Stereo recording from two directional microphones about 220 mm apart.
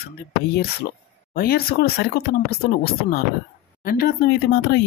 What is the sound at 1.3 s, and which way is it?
A woman's voice, 45° left (ahead or behind).